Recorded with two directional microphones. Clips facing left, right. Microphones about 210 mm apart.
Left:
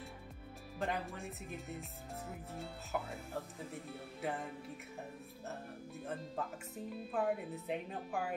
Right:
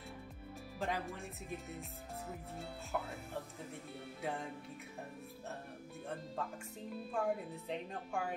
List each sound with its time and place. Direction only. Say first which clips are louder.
0.7 s speech: left 1 dB; centre (ahead or behind)
7.1 s speech: left 1 dB; 5° left (ahead or behind)